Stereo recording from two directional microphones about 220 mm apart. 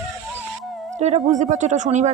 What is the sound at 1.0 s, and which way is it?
Speech, 30° right (ahead or behind).